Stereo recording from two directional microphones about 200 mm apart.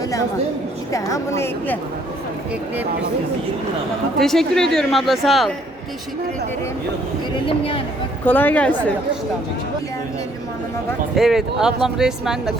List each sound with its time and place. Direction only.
0.9 s a woman's voice: 15° left (ahead or behind)
4.2 s speech: centre (ahead or behind)
7.4 s speech: 25° left (ahead or behind)
8.2 s a woman's voice: 10° left (ahead or behind)
11.1 s speech: centre (ahead or behind)